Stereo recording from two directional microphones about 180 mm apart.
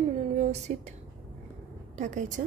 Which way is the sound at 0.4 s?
40° right (ahead or behind).